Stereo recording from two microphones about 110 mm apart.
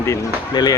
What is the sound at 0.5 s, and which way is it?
Speech, 45° left (ahead or behind).